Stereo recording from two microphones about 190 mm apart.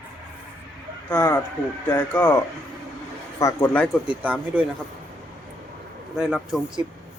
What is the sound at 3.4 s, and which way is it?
Speech, 15° left (ahead or behind).